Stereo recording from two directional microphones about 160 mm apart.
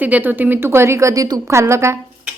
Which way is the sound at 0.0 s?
10° right (ahead or behind).